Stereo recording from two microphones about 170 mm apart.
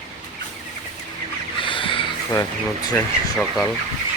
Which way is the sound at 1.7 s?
30° left (ahead or behind).